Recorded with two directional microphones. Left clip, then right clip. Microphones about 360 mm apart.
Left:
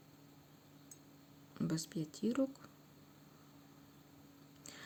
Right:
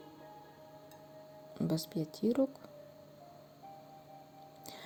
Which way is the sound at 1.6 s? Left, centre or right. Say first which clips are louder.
Right 5 dB; centre.